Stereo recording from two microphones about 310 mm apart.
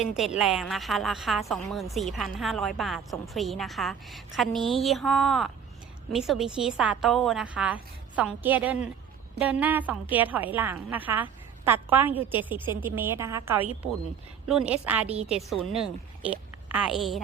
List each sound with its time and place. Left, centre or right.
0.1 s a woman's voice: centre